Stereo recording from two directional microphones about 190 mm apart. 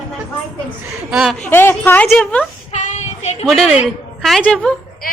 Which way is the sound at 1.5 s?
10° left (ahead or behind).